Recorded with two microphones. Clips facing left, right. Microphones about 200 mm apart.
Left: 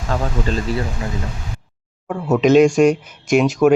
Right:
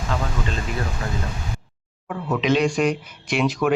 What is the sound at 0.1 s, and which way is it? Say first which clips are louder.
Speech: left 5 dB; 45° left (ahead or behind).